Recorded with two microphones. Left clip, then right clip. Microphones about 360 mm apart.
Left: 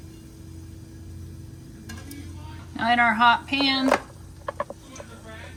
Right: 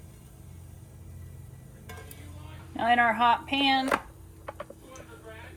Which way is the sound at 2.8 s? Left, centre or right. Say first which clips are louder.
Left 3 dB; centre.